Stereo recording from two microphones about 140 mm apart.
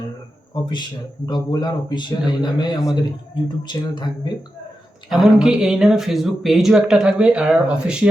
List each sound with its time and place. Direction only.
0.5 s speech: 30° left (ahead or behind)
5.0 s speech: centre (ahead or behind)